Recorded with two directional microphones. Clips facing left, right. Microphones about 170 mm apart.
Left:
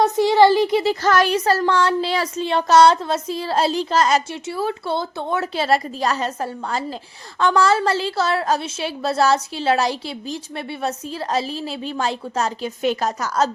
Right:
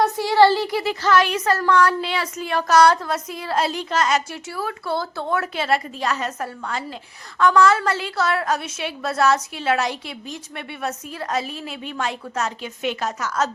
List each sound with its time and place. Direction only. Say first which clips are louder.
0.0 s a sound: left 2 dB; 20° left (ahead or behind)
1.0 s a woman's voice: right 2 dB; 40° left (ahead or behind); by 5.5 s 20° left (ahead or behind)
5.5 s a woman's voice: left 3 dB; 35° left (ahead or behind)